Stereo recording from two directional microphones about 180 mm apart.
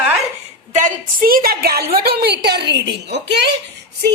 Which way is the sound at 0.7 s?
45° right (ahead or behind).